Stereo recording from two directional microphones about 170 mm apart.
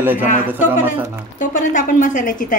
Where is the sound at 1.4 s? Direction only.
50° left (ahead or behind).